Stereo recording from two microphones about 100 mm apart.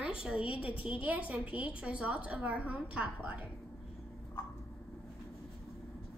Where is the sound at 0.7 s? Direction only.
65° left (ahead or behind).